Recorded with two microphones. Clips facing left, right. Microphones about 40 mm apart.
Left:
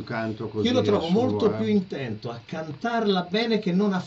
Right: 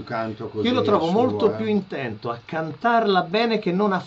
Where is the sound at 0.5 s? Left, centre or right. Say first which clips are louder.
Right 3 dB; right.